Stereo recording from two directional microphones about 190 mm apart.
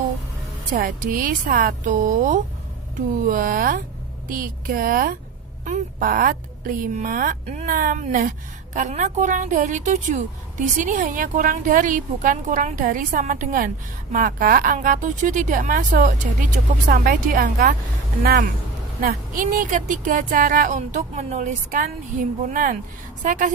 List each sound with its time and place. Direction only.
0.7 s a woman's voice: 45° right (ahead or behind)